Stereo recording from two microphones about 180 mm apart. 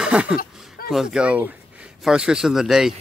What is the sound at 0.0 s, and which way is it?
Chuckle, 5° right (ahead or behind).